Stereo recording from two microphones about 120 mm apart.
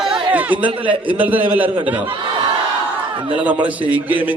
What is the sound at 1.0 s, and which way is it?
A man's voice, 15° right (ahead or behind).